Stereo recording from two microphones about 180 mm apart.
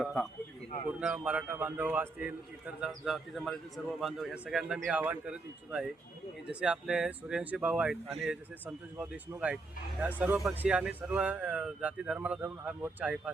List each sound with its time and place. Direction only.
0.0 s a man's voice: centre (ahead or behind)